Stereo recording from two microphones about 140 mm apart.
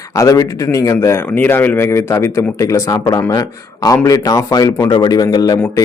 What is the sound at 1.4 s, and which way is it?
Speech, 15° left (ahead or behind).